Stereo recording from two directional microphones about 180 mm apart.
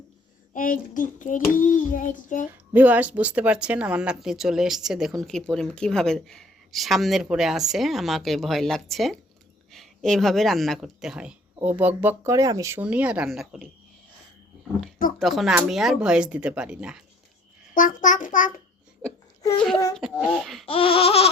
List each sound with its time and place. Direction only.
0.5 s child singing: 50° left (ahead or behind)
2.7 s speech: 10° right (ahead or behind)
15.2 s speech: centre (ahead or behind)
17.7 s child singing: 45° left (ahead or behind)
19.4 s a child's voice: 20° left (ahead or behind)
20.0 s speech: centre (ahead or behind)
20.7 s laughter: 30° left (ahead or behind)